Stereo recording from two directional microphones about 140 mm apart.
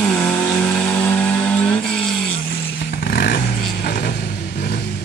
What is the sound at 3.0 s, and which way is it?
Vehicle, 90° left.